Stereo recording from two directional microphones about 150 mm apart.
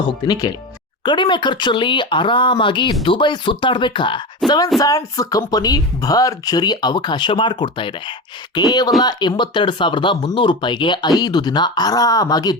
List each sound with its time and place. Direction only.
0.0 s a woman's voice: 30° left (ahead or behind)